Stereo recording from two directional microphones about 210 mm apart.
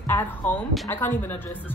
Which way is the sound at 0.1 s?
10° left (ahead or behind).